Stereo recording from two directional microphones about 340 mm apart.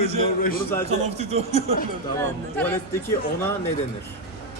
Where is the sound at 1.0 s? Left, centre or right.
Centre.